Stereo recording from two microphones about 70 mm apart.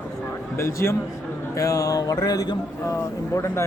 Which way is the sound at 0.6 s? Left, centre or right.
Left.